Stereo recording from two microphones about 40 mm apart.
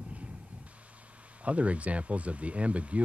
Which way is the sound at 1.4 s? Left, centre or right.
Right.